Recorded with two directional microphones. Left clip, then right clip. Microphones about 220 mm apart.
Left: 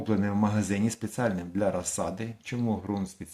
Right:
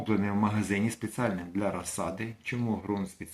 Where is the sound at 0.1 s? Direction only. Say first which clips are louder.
Left 1 dB; 40° left (ahead or behind).